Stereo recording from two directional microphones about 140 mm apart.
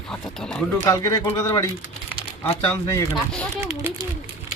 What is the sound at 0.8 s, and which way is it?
Speech, 25° left (ahead or behind).